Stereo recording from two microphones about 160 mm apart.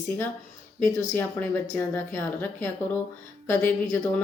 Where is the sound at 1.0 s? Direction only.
15° left (ahead or behind).